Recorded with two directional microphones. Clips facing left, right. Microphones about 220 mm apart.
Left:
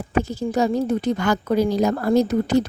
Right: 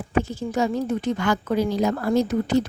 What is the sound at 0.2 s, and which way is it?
Speech, 40° left (ahead or behind).